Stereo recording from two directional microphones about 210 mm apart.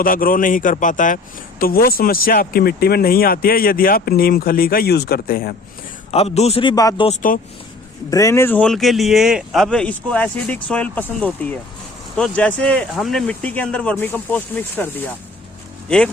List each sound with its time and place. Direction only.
0.0 s a man's voice: 40° left (ahead or behind)
6.1 s a man's voice: 30° left (ahead or behind); by 16.0 s 5° left (ahead or behind)